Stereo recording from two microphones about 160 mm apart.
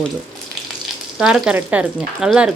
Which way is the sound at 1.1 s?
5° right (ahead or behind).